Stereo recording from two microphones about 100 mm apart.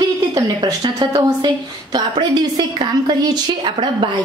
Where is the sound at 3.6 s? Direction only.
55° right (ahead or behind).